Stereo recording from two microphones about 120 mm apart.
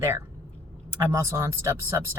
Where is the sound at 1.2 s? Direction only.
25° right (ahead or behind).